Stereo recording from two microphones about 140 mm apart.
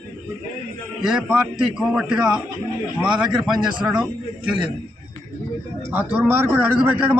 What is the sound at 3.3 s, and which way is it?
Speech, 30° right (ahead or behind).